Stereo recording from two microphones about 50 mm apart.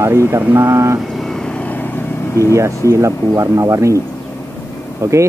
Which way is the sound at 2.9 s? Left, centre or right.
Right.